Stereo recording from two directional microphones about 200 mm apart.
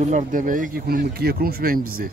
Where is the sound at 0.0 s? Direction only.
35° right (ahead or behind).